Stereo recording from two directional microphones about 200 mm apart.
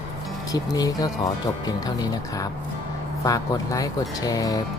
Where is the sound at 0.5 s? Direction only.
20° left (ahead or behind).